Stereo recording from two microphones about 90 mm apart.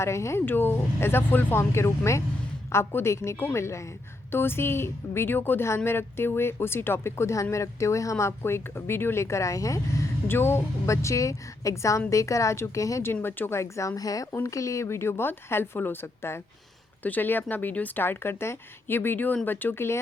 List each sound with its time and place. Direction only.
0.0 s a woman's voice: 30° left (ahead or behind)
10.2 s a woman's voice: 25° left (ahead or behind)